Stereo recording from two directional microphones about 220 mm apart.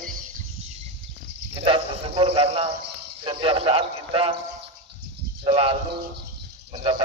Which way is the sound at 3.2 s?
25° right (ahead or behind).